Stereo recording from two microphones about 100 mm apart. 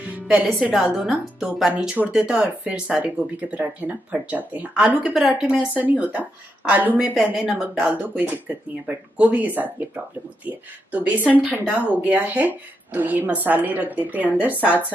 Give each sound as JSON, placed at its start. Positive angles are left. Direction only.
{"t": 0.0, "sound": "music", "side_deg": -15}
{"t": 0.5, "sound": "a woman's voice", "side_deg": -5}